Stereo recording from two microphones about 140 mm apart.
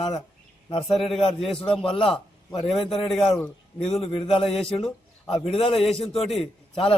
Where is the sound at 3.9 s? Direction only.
45° left (ahead or behind).